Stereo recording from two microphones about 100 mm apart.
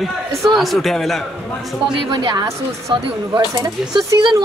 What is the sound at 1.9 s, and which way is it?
Speech, 50° right (ahead or behind).